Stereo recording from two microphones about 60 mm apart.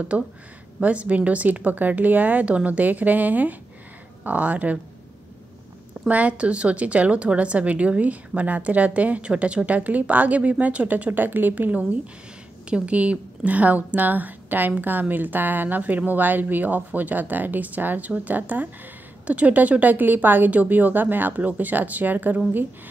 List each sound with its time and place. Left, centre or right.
0.1 s a woman's voice: right
6.0 s a woman's voice: right